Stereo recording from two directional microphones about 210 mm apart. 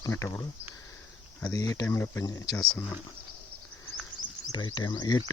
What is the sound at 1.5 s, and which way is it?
Speech, 15° left (ahead or behind).